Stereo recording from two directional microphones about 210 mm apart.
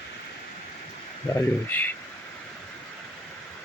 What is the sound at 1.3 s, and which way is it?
Speech, 10° left (ahead or behind).